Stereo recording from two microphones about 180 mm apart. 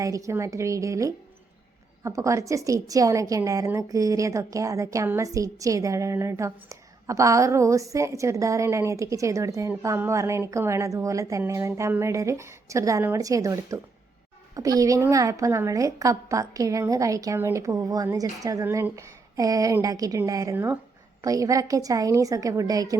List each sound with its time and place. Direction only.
0.0 s a woman's voice: 15° right (ahead or behind)